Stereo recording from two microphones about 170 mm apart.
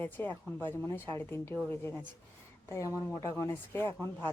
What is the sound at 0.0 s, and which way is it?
A woman's voice, 10° left (ahead or behind).